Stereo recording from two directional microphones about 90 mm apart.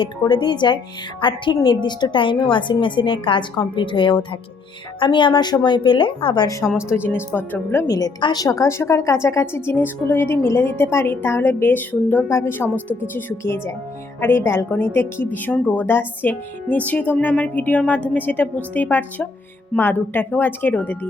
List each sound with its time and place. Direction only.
0.2 s a woman's voice: 60° left (ahead or behind)
6.7 s speech: 10° right (ahead or behind)
6.9 s speech: 25° left (ahead or behind)
7.9 s a woman's voice: 45° left (ahead or behind)
8.4 s speech: 35° left (ahead or behind)